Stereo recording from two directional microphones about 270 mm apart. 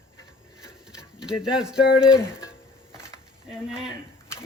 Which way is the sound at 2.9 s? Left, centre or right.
Centre.